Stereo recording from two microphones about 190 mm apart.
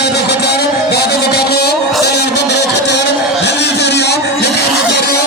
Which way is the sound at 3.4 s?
65° left (ahead or behind).